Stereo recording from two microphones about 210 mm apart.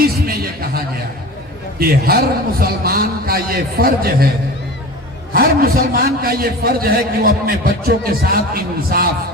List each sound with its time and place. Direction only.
0.0 s a sound: 45° right (ahead or behind)
1.8 s a man's voice: 45° right (ahead or behind)
5.3 s a man's voice: 45° right (ahead or behind)